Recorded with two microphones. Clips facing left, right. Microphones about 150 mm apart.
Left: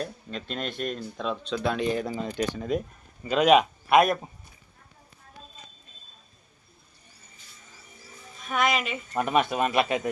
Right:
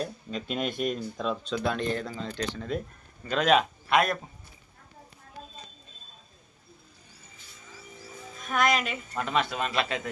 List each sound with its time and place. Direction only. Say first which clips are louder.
0.0 s speech: right 1 dB; centre (ahead or behind)
2.0 s speech: left 5 dB; 15° left (ahead or behind)
8.4 s speech: even; 5° left (ahead or behind)
9.1 s speech: left 5 dB; 20° left (ahead or behind)